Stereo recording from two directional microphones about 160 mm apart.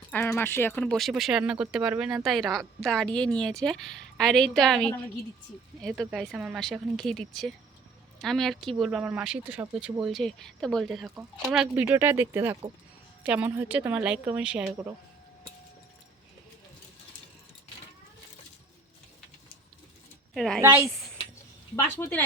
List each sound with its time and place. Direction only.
0.1 s speech: 10° left (ahead or behind)
11.1 s a woman's voice: 15° right (ahead or behind)
20.3 s a woman's voice: centre (ahead or behind)
20.6 s a woman's voice: 15° right (ahead or behind)
21.8 s speech: 15° left (ahead or behind)